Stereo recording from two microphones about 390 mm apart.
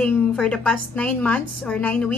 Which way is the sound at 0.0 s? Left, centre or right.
Centre.